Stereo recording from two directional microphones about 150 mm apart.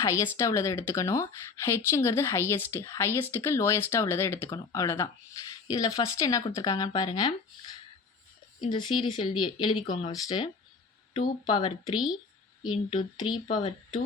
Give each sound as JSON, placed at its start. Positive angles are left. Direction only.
{"t": 0.0, "sound": "speech", "side_deg": 20}